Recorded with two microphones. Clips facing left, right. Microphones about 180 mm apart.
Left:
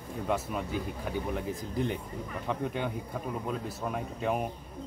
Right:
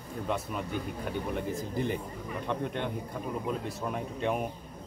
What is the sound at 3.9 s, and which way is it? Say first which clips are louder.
Speech: even; centre (ahead or behind).